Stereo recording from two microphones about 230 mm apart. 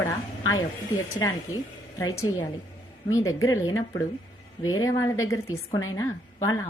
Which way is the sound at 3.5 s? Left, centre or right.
Centre.